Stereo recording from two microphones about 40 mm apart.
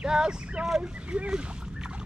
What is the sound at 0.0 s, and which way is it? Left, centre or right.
Speech, centre.